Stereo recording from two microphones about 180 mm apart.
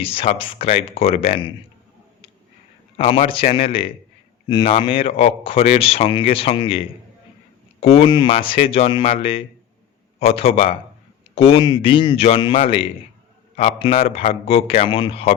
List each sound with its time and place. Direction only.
0.0 s speech: 30° left (ahead or behind)
3.0 s speech: 30° left (ahead or behind)